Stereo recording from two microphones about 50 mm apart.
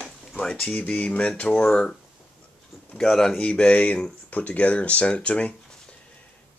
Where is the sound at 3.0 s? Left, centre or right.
Centre.